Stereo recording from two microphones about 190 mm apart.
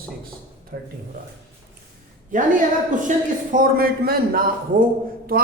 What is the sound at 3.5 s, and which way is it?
A man's voice, 50° right (ahead or behind).